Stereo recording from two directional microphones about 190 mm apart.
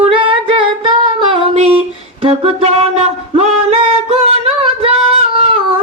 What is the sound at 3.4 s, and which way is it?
Singing, 30° right (ahead or behind).